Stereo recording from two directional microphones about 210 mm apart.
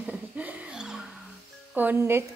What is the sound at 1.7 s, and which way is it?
Speech, 10° right (ahead or behind).